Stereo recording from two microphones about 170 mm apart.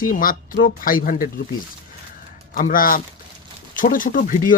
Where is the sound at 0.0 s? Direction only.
55° left (ahead or behind).